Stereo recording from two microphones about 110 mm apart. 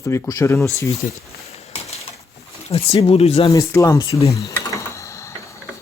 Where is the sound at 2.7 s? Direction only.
60° left (ahead or behind).